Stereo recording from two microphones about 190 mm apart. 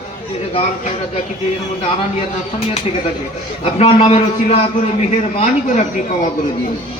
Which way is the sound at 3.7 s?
30° left (ahead or behind).